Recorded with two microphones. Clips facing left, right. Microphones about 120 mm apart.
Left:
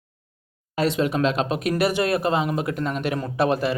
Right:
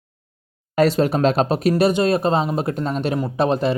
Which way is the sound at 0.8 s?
40° right (ahead or behind).